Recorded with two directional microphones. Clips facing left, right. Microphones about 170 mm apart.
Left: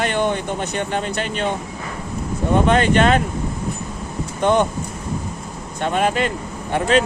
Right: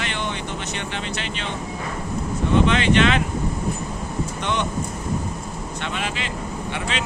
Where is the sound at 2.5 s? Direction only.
45° left (ahead or behind).